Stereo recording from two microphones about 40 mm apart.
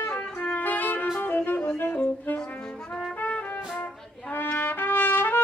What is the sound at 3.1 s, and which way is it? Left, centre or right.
Trumpet, left.